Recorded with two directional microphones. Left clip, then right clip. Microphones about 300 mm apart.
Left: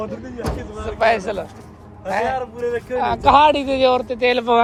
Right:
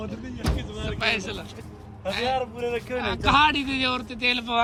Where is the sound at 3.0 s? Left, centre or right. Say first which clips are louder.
Left 8 dB; centre.